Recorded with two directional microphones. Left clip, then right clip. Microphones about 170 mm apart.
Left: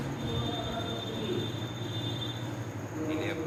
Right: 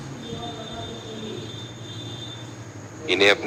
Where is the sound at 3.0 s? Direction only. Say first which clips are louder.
Right 17 dB; 50° right (ahead or behind).